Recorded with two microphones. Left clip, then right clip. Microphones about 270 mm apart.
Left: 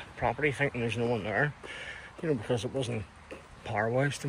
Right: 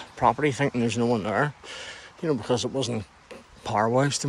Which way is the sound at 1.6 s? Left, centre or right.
Right.